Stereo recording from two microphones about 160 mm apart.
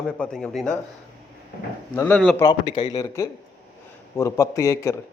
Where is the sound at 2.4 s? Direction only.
25° left (ahead or behind).